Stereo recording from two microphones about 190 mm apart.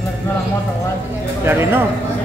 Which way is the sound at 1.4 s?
10° right (ahead or behind).